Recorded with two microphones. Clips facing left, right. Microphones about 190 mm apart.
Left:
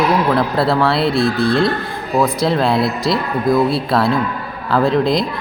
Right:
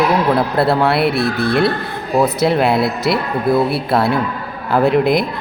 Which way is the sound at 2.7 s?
55° right (ahead or behind).